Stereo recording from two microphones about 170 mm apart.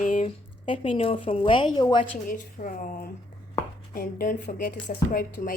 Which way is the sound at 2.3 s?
50° left (ahead or behind).